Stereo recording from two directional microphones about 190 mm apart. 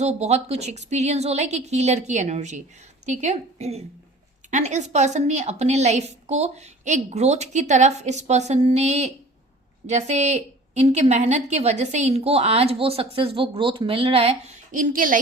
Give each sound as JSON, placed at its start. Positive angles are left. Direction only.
{"t": 0.0, "sound": "a woman's voice", "side_deg": -35}